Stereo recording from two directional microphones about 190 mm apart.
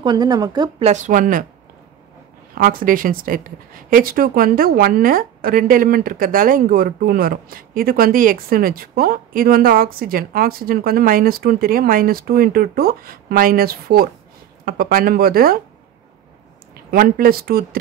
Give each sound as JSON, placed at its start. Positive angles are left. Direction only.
{"t": 0.0, "sound": "speech", "side_deg": -20}
{"t": 0.8, "sound": "speech", "side_deg": -40}
{"t": 2.5, "sound": "speech", "side_deg": -50}
{"t": 16.9, "sound": "speech", "side_deg": -50}